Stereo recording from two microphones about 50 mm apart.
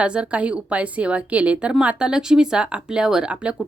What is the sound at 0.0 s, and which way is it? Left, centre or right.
Speech, right.